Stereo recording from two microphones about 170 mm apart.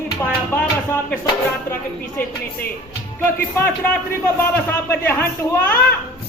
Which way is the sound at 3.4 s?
10° left (ahead or behind).